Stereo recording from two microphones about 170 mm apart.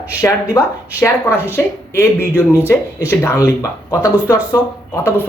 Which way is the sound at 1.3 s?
10° right (ahead or behind).